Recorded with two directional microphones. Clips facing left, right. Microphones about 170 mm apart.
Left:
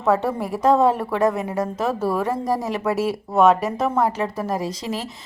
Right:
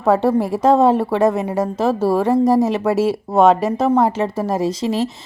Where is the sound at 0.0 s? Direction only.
30° right (ahead or behind).